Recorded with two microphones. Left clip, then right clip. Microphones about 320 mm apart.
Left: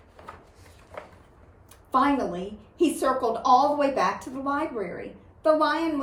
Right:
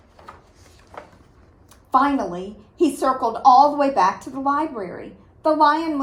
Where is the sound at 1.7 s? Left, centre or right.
Centre.